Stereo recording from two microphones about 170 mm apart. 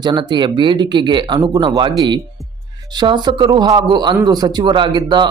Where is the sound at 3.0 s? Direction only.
25° right (ahead or behind).